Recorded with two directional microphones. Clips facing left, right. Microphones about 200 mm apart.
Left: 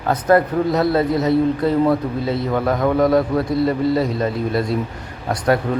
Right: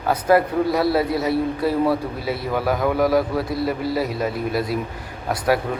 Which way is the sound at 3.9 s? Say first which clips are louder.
Left 4 dB; 25° left (ahead or behind).